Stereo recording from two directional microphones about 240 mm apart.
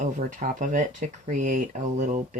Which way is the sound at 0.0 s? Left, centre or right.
Right.